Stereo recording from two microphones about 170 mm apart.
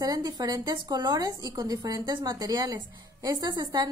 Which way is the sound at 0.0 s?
25° right (ahead or behind).